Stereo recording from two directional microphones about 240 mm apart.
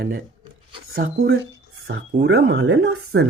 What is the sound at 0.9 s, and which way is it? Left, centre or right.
Speech, right.